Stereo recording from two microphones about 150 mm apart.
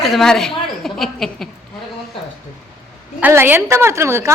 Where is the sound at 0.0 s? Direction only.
Centre (ahead or behind).